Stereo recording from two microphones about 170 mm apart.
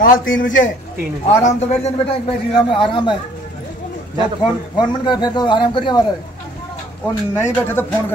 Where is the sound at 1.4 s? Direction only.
45° left (ahead or behind).